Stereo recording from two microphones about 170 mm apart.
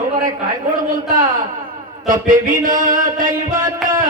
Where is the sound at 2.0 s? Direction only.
50° right (ahead or behind).